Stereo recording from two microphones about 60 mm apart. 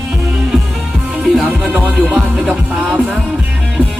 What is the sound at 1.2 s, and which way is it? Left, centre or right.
Music, centre.